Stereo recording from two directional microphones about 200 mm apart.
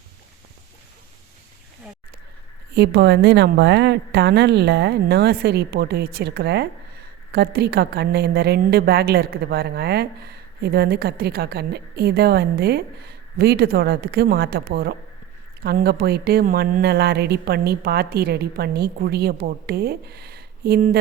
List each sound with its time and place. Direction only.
2.7 s a woman's voice: 55° right (ahead or behind)